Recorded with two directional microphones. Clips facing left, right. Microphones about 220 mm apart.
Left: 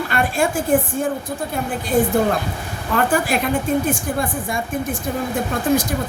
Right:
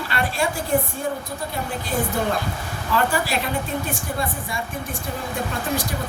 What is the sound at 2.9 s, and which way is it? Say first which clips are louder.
A woman's voice: left 4 dB; 50° left (ahead or behind).